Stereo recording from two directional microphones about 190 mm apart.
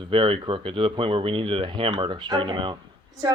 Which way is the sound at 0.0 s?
25° right (ahead or behind).